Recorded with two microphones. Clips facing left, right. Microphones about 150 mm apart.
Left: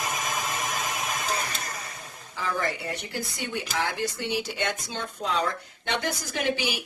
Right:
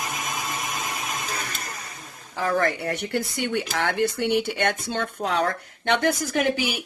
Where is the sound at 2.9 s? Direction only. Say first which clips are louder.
Right 7 dB; 65° right (ahead or behind).